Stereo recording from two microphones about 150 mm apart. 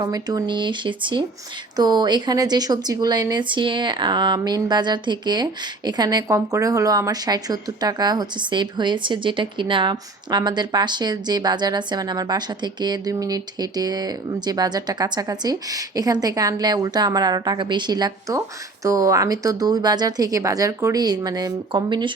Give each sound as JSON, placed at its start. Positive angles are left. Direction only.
{"t": 0.0, "sound": "a woman's voice", "side_deg": -25}